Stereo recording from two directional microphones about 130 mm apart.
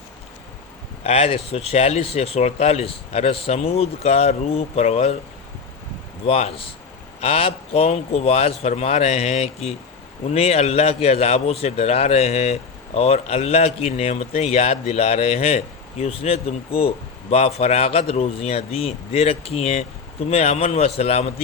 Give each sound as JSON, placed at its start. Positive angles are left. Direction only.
{"t": 1.0, "sound": "a man's voice", "side_deg": 50}
{"t": 6.2, "sound": "a man's voice", "side_deg": 50}